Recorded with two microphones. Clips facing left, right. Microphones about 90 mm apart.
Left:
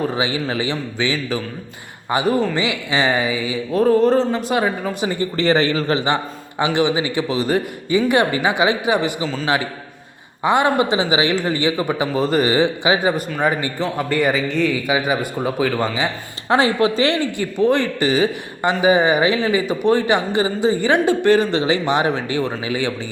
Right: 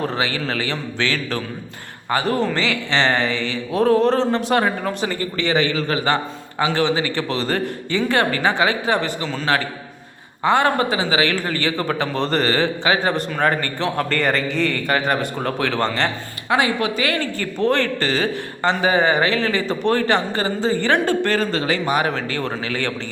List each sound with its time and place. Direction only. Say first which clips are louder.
0.0 s speech: left 2 dB; 10° left (ahead or behind)
2.3 s a man's voice: left 1 dB; 5° left (ahead or behind)
5.4 s speech: left 3 dB; 35° left (ahead or behind)
6.6 s speech: left 1 dB; 15° left (ahead or behind)
10.4 s speech: left 1 dB; 15° left (ahead or behind)
16.5 s speech: left 3 dB; 30° left (ahead or behind)
17.2 s speech: left 3 dB; 15° left (ahead or behind)